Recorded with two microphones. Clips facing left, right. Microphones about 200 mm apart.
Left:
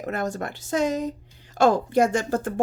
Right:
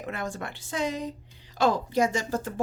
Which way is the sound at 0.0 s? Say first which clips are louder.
Left 6 dB; 40° left (ahead or behind).